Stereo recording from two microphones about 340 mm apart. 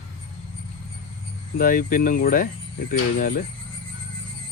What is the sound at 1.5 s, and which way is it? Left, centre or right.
Speech, left.